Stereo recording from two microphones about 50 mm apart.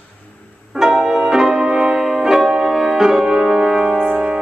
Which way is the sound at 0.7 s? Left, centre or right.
Centre.